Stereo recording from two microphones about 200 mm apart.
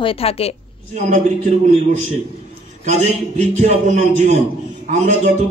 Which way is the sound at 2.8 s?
35° right (ahead or behind).